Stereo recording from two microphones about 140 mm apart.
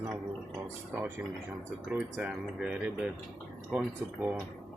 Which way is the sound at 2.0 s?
5° right (ahead or behind).